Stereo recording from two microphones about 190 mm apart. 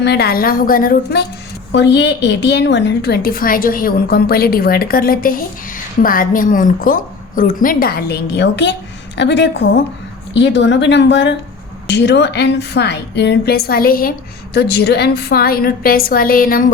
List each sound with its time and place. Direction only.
0.0 s a woman's voice: 60° left (ahead or behind)
1.7 s a woman's voice: 65° left (ahead or behind); by 16.7 s 50° left (ahead or behind)